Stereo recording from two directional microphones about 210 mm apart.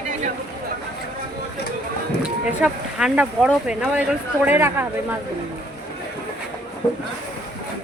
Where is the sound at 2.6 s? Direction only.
5° right (ahead or behind).